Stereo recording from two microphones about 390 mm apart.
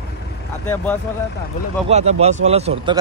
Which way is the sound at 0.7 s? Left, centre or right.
Centre.